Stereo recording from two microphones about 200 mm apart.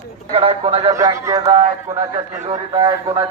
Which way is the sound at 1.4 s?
25° right (ahead or behind).